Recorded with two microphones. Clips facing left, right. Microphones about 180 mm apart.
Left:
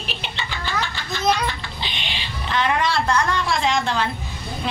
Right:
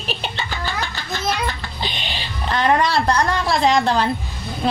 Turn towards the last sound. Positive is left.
turn(degrees=-40)  # may be behind; listen again after turning